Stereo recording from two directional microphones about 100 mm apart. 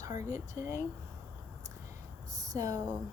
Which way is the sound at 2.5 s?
35° right (ahead or behind).